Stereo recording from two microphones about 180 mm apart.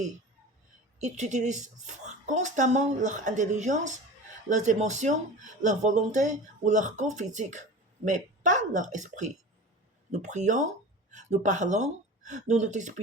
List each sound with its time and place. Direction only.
0.9 s a woman's voice: 40° right (ahead or behind)